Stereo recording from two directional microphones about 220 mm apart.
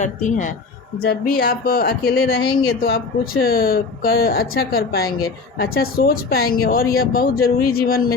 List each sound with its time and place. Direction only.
0.0 s a man's voice: 35° left (ahead or behind)
1.0 s speech: 45° left (ahead or behind)